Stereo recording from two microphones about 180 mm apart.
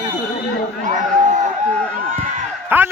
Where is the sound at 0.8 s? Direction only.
45° right (ahead or behind).